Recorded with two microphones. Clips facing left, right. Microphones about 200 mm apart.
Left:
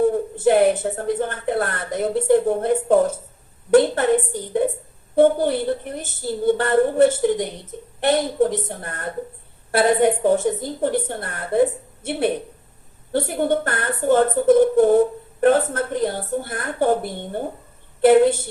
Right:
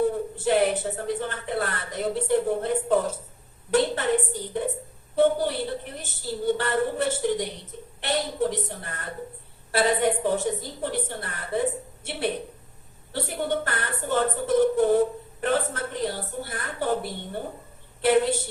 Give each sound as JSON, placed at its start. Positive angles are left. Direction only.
{"t": 0.0, "sound": "a woman's voice", "side_deg": 50}
{"t": 13.1, "sound": "a woman's voice", "side_deg": 50}